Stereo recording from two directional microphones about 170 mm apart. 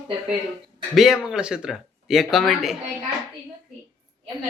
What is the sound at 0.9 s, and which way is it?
Speech, centre (ahead or behind).